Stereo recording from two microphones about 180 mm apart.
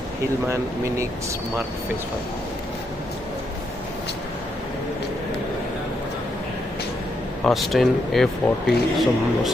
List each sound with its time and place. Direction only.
0.4 s speech: 15° right (ahead or behind)
7.4 s speech: centre (ahead or behind)